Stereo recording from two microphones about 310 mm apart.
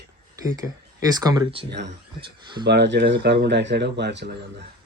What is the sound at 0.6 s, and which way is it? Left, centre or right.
Speech, centre.